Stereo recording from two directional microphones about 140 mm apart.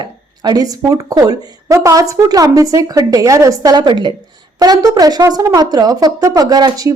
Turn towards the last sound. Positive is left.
turn(degrees=-25)  # may be behind; listen again after turning